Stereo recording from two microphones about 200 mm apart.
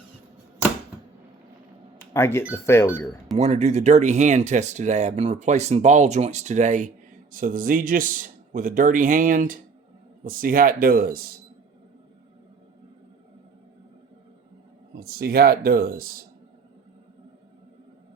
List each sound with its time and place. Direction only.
2.1 s speech: 10° left (ahead or behind)
3.3 s speech: 30° right (ahead or behind)
14.9 s speech: 50° right (ahead or behind)